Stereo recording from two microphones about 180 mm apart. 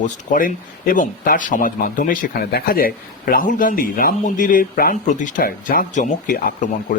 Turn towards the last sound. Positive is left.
turn(degrees=50)  # may be behind; listen again after turning